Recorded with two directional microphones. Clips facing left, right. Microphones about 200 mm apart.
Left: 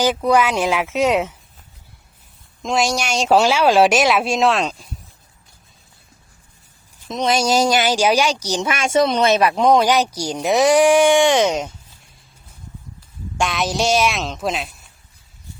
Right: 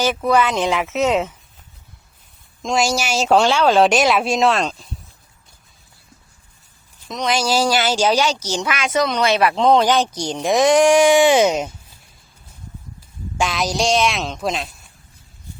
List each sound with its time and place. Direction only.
0.3 s speech: 10° left (ahead or behind)
2.6 s speech: centre (ahead or behind)
7.1 s speech: 25° left (ahead or behind)
8.6 s speech: 25° left (ahead or behind); by 11.7 s 5° right (ahead or behind)
13.3 s speech: centre (ahead or behind)